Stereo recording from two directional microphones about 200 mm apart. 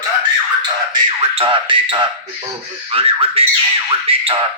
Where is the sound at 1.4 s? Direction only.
25° right (ahead or behind).